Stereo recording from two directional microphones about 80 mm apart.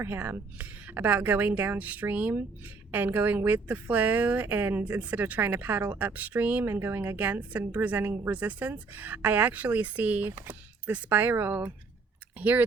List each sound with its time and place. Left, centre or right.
0.0 s a woman's voice: right